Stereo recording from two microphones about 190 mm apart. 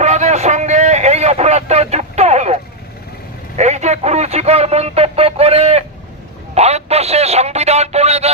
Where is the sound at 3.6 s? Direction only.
35° right (ahead or behind).